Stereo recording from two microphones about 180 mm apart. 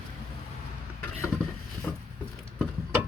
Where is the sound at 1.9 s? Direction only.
10° left (ahead or behind).